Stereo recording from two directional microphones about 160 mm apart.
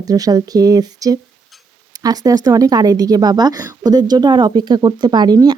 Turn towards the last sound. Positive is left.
turn(degrees=-25)  # may be behind; listen again after turning